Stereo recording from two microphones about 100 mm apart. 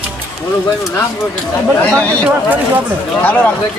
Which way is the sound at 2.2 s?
15° right (ahead or behind).